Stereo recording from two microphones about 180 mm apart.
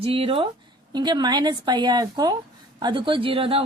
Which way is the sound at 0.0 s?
30° right (ahead or behind).